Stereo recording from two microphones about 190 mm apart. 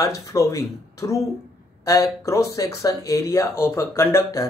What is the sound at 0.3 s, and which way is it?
Speech, 15° left (ahead or behind).